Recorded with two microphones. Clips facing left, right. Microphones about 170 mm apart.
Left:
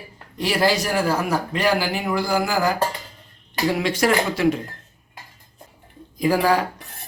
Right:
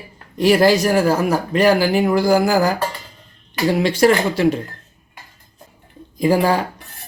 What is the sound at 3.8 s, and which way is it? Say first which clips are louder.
Speech: right 6 dB; 30° right (ahead or behind).